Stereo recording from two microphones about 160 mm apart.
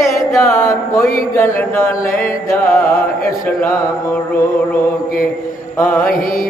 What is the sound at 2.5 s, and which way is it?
Music, 20° left (ahead or behind).